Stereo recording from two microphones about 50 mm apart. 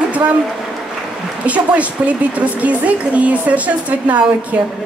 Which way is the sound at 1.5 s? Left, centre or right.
Right.